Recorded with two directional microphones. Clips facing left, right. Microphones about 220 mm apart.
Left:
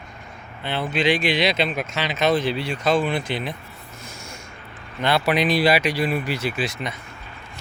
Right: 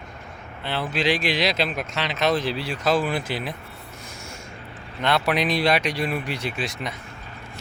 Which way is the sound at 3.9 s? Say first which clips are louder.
Left 2 dB; centre (ahead or behind).